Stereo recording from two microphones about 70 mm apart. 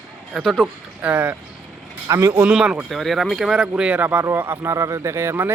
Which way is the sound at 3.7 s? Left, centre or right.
Centre.